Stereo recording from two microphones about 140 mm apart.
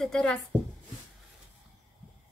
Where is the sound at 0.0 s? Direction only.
5° left (ahead or behind).